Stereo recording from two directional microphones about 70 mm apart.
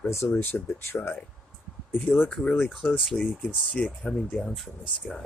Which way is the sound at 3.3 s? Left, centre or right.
Centre.